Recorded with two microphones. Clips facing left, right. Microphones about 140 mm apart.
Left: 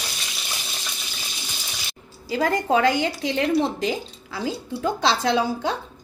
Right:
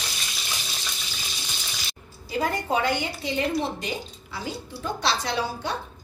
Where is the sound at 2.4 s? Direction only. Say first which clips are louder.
Left 5 dB; 90° left.